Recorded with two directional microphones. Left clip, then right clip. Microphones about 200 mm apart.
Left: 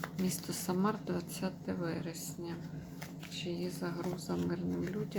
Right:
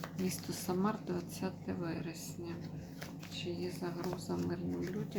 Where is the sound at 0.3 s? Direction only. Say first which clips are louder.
Right 1 dB; 20° left (ahead or behind).